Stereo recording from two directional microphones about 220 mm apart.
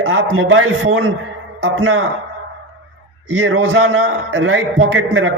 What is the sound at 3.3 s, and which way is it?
Speech, 65° right (ahead or behind).